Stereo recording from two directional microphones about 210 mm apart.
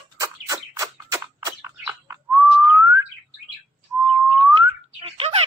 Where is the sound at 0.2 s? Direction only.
15° right (ahead or behind).